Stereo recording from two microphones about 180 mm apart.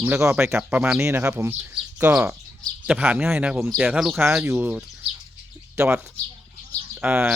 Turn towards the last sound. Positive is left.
turn(degrees=-5)  # may be behind; listen again after turning